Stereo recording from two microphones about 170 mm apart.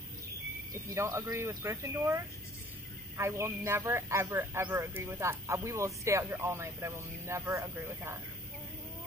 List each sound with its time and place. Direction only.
0.7 s speech: 15° right (ahead or behind)